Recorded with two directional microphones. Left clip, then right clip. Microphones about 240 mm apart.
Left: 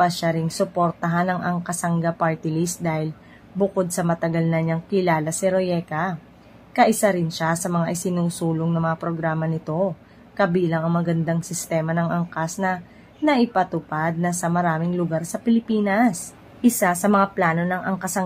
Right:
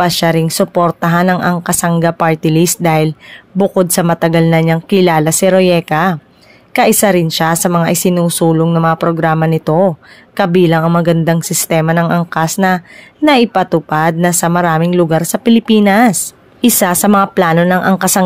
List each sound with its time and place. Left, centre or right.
0.0 s speech: right